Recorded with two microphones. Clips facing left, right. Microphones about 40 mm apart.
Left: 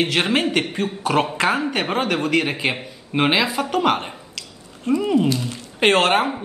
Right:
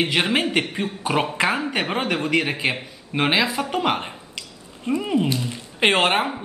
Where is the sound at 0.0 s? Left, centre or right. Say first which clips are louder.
Left 1 dB; centre.